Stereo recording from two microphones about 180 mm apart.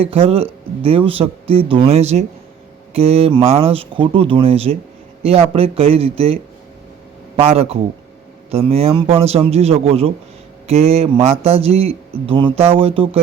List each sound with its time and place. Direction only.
0.0 s a man's voice: 30° right (ahead or behind)